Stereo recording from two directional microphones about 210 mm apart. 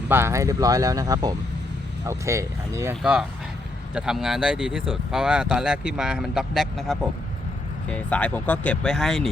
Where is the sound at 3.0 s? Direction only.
5° right (ahead or behind).